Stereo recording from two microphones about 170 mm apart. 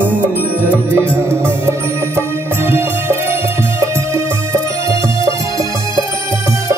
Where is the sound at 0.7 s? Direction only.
15° right (ahead or behind).